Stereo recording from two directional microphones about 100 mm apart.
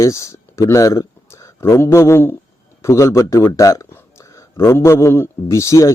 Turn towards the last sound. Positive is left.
turn(degrees=30)  # may be behind; listen again after turning